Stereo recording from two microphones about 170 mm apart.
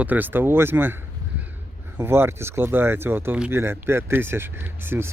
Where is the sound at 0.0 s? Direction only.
10° right (ahead or behind).